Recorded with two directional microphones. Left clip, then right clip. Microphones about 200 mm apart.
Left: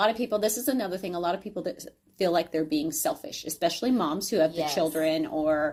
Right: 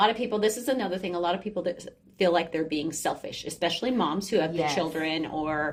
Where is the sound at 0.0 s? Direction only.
50° left (ahead or behind).